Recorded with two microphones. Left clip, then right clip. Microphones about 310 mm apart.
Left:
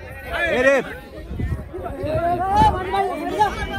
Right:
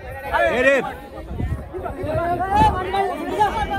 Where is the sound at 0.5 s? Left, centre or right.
Centre.